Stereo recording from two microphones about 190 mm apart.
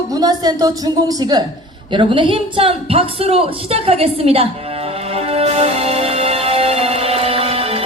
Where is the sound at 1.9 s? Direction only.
25° right (ahead or behind).